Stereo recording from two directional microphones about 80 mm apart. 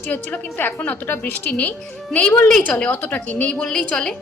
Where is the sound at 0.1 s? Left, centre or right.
Left.